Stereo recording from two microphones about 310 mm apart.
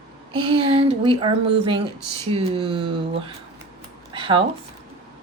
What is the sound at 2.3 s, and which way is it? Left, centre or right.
Speech, centre.